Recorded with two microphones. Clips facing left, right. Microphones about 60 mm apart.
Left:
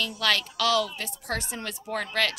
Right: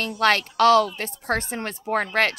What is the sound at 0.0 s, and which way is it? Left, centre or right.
A woman's voice, right.